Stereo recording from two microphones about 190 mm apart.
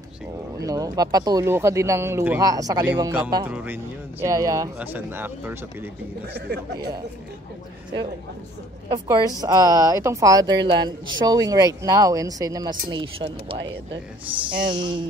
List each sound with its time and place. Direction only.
0.6 s speech: 20° right (ahead or behind)
6.3 s speech: 60° right (ahead or behind)
8.8 s speech: 20° right (ahead or behind)